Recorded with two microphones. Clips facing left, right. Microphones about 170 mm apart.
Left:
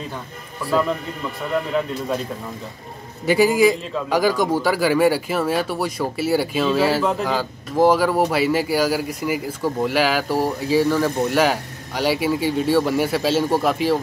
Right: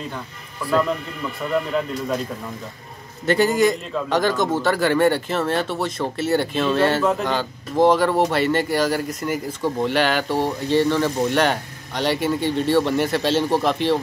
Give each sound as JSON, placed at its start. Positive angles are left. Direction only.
{"t": 3.3, "sound": "a man's voice", "side_deg": 5}